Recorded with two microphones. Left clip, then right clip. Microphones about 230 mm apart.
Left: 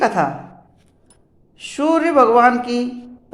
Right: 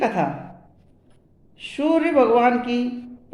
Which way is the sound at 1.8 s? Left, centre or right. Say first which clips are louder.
Left 3 dB; centre.